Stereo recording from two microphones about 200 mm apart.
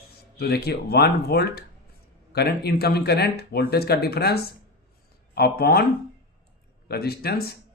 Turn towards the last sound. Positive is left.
turn(degrees=50)  # may be behind; listen again after turning